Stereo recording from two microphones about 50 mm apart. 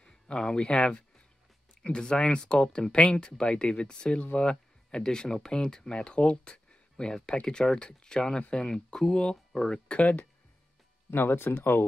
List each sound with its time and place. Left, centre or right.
0.0 s speech: centre
9.8 s speech: left
11.1 s speech: left